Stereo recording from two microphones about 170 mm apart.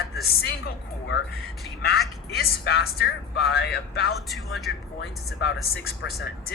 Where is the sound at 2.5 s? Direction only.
65° left (ahead or behind).